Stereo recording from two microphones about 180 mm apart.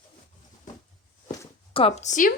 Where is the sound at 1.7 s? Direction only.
35° left (ahead or behind).